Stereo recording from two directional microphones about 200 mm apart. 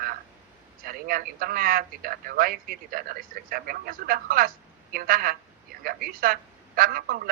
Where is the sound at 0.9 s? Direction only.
45° right (ahead or behind).